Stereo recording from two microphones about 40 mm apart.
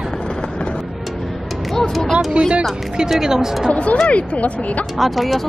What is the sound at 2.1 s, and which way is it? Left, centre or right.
Speech, centre.